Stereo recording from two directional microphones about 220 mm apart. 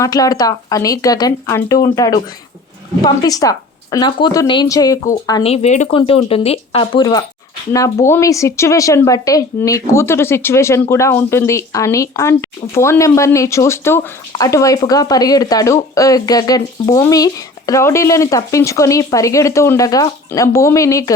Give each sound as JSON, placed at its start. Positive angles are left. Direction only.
{"t": 0.0, "sound": "speech", "side_deg": 15}
{"t": 5.5, "sound": "speech", "side_deg": 30}